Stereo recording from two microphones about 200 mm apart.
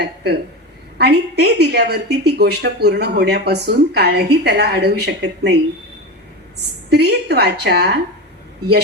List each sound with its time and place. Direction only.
0.9 s a woman's voice: 55° right (ahead or behind)
6.9 s a woman's voice: 55° right (ahead or behind)